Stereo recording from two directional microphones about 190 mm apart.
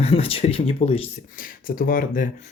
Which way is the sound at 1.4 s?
50° left (ahead or behind).